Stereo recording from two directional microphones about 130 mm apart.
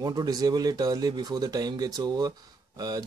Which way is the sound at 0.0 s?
30° right (ahead or behind).